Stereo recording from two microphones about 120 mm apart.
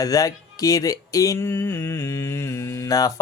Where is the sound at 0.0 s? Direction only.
30° left (ahead or behind).